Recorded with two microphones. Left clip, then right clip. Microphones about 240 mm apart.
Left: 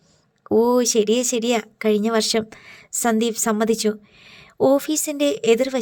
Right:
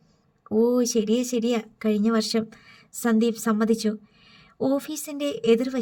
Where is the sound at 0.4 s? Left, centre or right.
Left.